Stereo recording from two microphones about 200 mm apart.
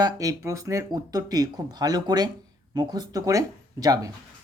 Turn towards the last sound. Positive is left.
turn(degrees=-15)  # may be behind; listen again after turning